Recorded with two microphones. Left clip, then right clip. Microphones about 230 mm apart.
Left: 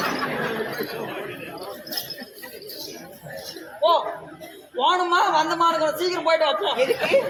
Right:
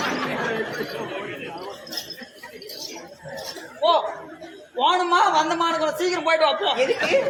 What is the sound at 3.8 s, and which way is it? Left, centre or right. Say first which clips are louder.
Chuckle: even; centre.